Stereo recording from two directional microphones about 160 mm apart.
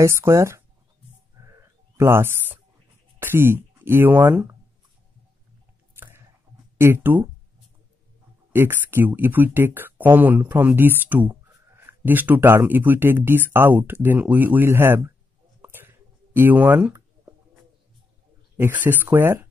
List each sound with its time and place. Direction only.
0.0 s speech: 15° right (ahead or behind)
1.4 s a sound: 15° right (ahead or behind)
3.2 s speech: 15° right (ahead or behind)
5.9 s squish: 15° right (ahead or behind)
6.8 s speech: 15° right (ahead or behind)
8.5 s speech: 15° right (ahead or behind)
15.6 s a sound: 15° right (ahead or behind)
18.6 s speech: 10° right (ahead or behind)